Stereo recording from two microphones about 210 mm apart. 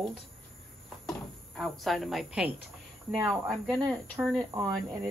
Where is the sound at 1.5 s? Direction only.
Centre (ahead or behind).